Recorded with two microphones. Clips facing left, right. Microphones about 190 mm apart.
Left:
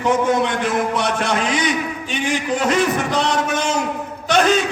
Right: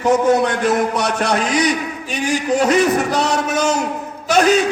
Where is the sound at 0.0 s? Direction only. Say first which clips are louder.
Right 3 dB; 40° right (ahead or behind).